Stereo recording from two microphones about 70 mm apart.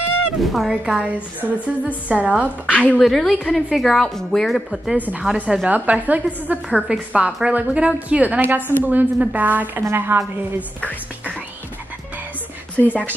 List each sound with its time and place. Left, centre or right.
0.4 s a woman's voice: centre
3.0 s a woman's voice: centre
4.9 s a woman's voice: right
8.4 s a woman's voice: right
10.8 s music: left
12.7 s speech: left